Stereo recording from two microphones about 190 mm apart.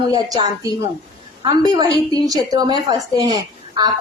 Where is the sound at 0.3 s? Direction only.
20° right (ahead or behind).